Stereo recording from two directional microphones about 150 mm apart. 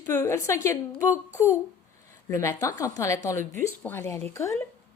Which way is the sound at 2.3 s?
20° left (ahead or behind).